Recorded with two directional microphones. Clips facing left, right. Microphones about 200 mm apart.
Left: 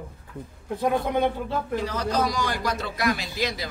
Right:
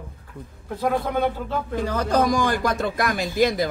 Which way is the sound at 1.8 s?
55° right (ahead or behind).